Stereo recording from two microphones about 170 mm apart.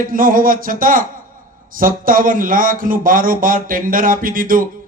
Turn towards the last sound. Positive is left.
turn(degrees=-55)  # may be behind; listen again after turning